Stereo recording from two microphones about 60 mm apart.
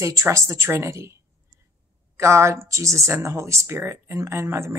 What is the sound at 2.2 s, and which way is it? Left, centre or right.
Speech, right.